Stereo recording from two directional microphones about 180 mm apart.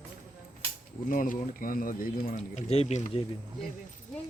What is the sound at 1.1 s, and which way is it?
Speech, 45° left (ahead or behind).